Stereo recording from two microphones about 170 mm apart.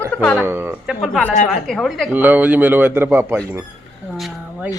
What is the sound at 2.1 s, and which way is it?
Speech, 10° right (ahead or behind).